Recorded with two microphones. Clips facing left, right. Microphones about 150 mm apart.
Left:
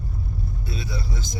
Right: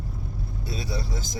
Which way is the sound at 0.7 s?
35° right (ahead or behind).